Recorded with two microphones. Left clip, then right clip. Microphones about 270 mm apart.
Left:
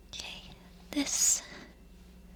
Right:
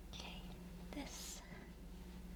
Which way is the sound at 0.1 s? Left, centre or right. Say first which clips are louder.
Left 11 dB; left.